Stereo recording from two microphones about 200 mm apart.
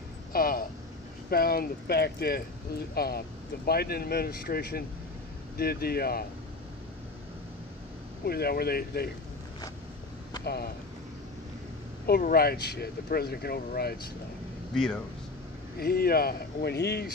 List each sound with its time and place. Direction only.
0.3 s speech: 45° left (ahead or behind)
8.3 s speech: 50° left (ahead or behind)
10.4 s speech: 55° left (ahead or behind)
12.1 s speech: 50° left (ahead or behind)
15.8 s speech: 50° left (ahead or behind)